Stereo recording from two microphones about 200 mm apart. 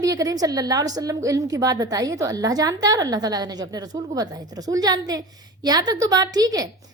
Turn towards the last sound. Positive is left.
turn(degrees=-20)  # may be behind; listen again after turning